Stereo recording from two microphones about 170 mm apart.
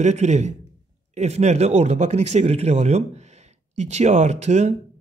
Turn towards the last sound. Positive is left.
turn(degrees=-40)  # may be behind; listen again after turning